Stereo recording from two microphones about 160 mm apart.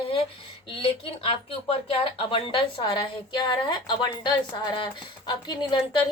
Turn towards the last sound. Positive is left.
turn(degrees=25)  # may be behind; listen again after turning